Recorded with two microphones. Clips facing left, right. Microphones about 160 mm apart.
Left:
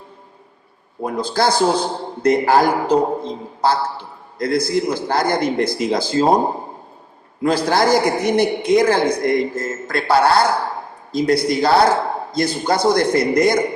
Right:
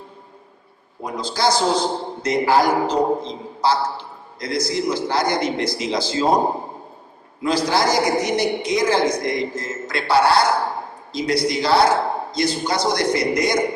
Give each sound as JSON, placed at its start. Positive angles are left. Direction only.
{"t": 1.0, "sound": "a man's voice", "side_deg": 55}
{"t": 7.4, "sound": "a man's voice", "side_deg": 55}